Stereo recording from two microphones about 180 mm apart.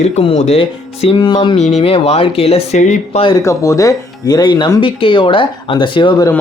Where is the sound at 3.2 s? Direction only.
20° left (ahead or behind).